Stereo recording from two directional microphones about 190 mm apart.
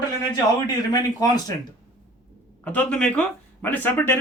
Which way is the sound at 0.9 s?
20° left (ahead or behind).